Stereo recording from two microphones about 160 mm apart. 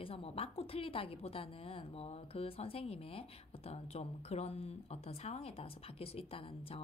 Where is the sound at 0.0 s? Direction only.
35° left (ahead or behind).